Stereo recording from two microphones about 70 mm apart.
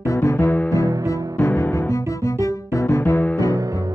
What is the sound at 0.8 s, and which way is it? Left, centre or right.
Music, right.